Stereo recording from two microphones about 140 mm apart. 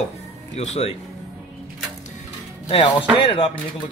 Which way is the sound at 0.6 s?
50° left (ahead or behind).